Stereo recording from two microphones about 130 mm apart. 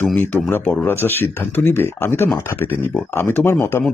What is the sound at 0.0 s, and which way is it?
Speech, 10° left (ahead or behind).